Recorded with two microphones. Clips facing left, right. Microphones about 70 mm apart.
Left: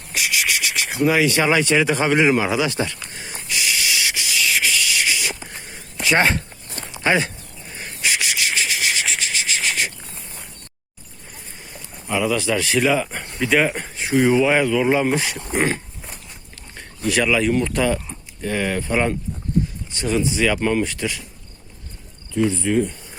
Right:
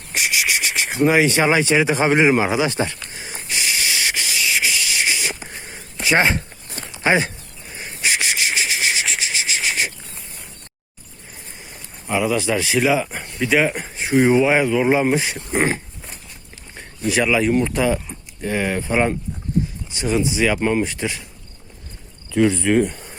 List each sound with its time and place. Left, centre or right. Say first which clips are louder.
0.1 s insect: right 1 dB; right
0.3 s speech: right 1 dB; right
3.1 s a sound: right 1 dB; centre
3.5 s spray: even; right
4.4 s spray: left 1 dB; centre
6.0 s a sound: even; centre
7.0 s speech: right 1 dB; centre
7.7 s a sound: right 1 dB; centre
8.0 s rub: right 1 dB; right
12.0 s speech: right 1 dB; centre
12.7 s speech: right 1 dB; centre
13.9 s speech: right 2 dB; right
14.4 s speech: right 1 dB; centre
22.3 s speech: right 3 dB; right